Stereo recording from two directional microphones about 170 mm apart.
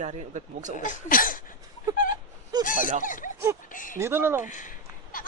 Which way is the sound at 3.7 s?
50° left (ahead or behind).